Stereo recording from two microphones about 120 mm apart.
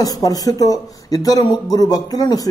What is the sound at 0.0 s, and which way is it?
Speech, 30° left (ahead or behind).